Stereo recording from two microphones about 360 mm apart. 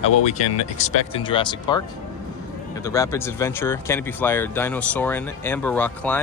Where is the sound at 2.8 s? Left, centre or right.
Centre.